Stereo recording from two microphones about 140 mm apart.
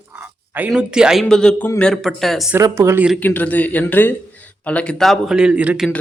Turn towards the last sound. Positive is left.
turn(degrees=-10)  # may be behind; listen again after turning